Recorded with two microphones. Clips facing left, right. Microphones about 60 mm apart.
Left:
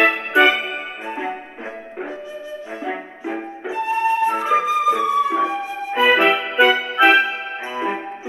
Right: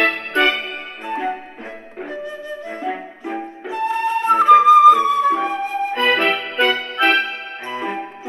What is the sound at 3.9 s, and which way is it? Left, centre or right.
Music, right.